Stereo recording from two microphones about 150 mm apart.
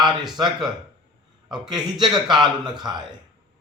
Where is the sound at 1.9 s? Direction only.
30° right (ahead or behind).